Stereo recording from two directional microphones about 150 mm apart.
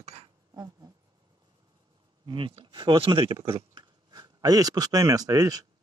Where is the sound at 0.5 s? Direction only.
25° right (ahead or behind).